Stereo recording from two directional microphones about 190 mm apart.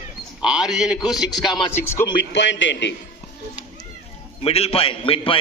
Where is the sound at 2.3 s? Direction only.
70° left (ahead or behind).